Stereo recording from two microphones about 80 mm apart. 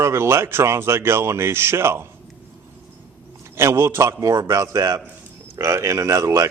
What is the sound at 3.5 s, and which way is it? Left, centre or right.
A man's voice, right.